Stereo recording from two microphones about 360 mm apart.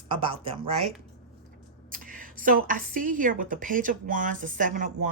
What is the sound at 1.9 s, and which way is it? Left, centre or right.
Speech, right.